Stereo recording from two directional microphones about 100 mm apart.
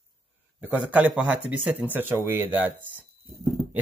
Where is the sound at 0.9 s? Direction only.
15° right (ahead or behind).